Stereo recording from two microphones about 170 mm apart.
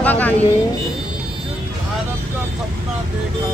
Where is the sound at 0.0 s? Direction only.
10° left (ahead or behind).